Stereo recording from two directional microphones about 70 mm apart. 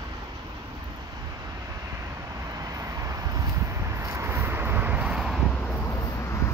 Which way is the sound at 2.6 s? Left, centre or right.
Right.